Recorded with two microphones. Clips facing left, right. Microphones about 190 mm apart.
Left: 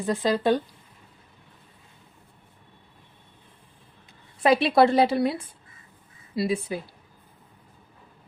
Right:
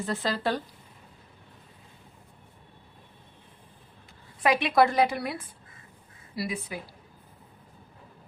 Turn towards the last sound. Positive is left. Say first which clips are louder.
# left 7 dB
turn(degrees=25)  # may be behind; listen again after turning